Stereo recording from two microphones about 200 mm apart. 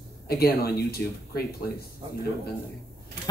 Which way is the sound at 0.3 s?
50° left (ahead or behind).